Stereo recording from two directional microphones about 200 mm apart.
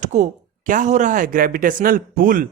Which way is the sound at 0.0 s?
35° right (ahead or behind).